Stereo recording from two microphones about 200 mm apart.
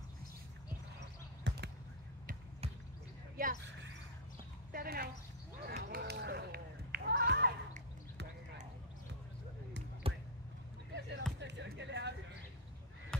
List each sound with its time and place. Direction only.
1.5 s basketball bounce: 65° right (ahead or behind)
3.4 s speech: 50° right (ahead or behind)
4.7 s a sound: 50° right (ahead or behind)
5.7 s run: 50° right (ahead or behind)
10.0 s a sound: 30° right (ahead or behind)
11.0 s basketball bounce: 60° right (ahead or behind)
11.3 s music: 60° right (ahead or behind)